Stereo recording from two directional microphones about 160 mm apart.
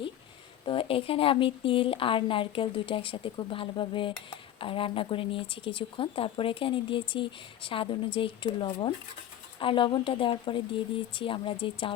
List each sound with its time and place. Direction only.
0.6 s speech: 35° left (ahead or behind)